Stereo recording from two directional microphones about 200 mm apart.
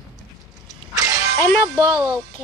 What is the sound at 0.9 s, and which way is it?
Shatter, 15° right (ahead or behind).